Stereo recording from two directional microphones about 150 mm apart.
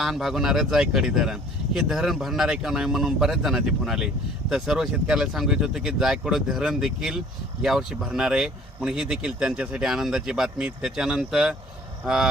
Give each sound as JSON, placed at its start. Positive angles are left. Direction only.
{"t": 0.0, "sound": "speech", "side_deg": 0}